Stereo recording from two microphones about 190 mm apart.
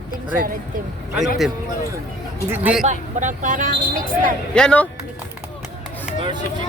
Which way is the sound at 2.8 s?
40° right (ahead or behind).